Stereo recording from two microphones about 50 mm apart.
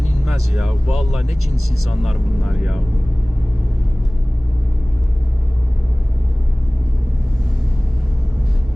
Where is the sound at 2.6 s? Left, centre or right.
Centre.